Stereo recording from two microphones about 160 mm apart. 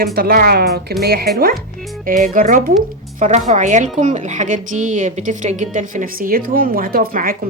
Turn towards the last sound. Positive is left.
turn(degrees=-60)  # may be behind; listen again after turning